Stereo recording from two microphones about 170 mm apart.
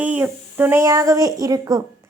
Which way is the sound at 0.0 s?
10° right (ahead or behind).